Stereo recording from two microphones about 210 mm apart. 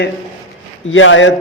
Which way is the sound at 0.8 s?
65° left (ahead or behind).